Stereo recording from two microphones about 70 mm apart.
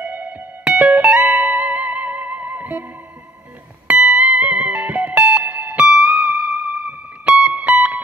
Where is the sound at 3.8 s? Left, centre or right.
Right.